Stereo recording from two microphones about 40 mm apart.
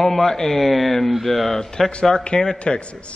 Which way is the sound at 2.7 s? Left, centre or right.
Left.